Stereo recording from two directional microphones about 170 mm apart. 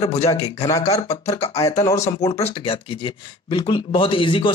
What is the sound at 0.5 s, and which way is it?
Speech, 20° left (ahead or behind).